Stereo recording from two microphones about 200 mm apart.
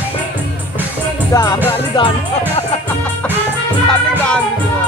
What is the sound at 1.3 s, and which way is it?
Music, 15° left (ahead or behind).